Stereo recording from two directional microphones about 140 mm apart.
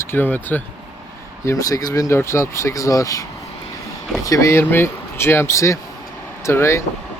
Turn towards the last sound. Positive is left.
turn(degrees=20)  # may be behind; listen again after turning